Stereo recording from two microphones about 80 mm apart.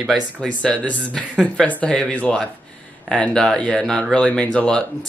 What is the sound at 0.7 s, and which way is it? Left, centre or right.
A man's voice, centre.